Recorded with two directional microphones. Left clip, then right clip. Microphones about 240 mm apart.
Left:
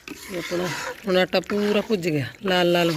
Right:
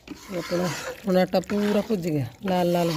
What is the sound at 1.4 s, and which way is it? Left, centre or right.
Speech, right.